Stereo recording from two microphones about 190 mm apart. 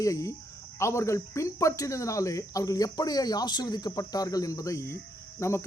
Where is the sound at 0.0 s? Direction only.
15° left (ahead or behind).